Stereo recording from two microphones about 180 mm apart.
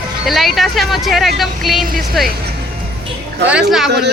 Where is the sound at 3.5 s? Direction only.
5° right (ahead or behind).